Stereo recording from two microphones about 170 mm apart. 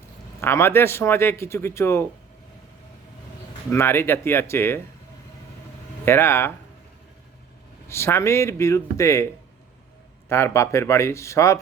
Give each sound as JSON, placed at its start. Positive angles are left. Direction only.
{"t": 0.4, "sound": "speech", "side_deg": 15}
{"t": 3.7, "sound": "speech", "side_deg": 15}
{"t": 6.1, "sound": "speech", "side_deg": 15}
{"t": 7.9, "sound": "speech", "side_deg": 15}
{"t": 10.2, "sound": "speech", "side_deg": 15}